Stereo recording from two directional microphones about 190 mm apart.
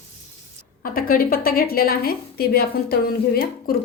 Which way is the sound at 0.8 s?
50° left (ahead or behind).